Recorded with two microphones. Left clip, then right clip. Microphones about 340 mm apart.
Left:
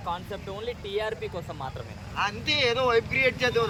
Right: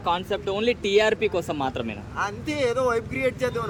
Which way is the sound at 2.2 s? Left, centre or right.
Centre.